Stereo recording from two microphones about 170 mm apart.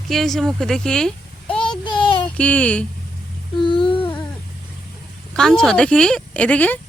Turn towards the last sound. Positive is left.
turn(degrees=10)  # may be behind; listen again after turning